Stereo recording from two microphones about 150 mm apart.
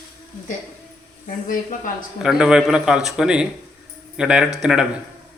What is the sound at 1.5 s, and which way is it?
Speech, 65° left (ahead or behind).